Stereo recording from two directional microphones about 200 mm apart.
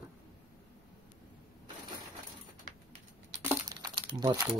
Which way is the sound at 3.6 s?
20° right (ahead or behind).